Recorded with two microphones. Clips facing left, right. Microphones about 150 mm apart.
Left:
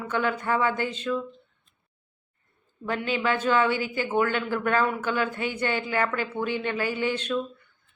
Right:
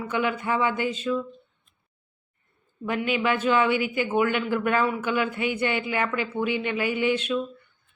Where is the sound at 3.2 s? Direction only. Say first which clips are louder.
Even; 10° right (ahead or behind).